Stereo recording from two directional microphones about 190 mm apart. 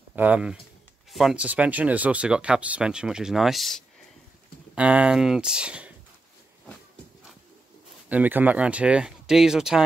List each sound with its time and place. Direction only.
0.1 s speech: 10° right (ahead or behind)
8.1 s speech: 10° right (ahead or behind)